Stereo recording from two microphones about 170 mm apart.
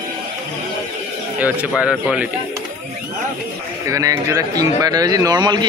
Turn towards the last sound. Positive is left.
turn(degrees=-25)  # may be behind; listen again after turning